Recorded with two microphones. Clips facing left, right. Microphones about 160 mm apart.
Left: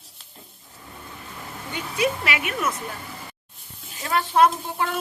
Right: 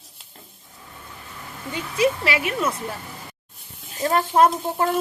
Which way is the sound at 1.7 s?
30° right (ahead or behind).